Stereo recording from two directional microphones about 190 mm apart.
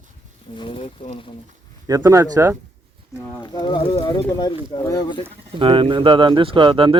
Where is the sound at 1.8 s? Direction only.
20° right (ahead or behind).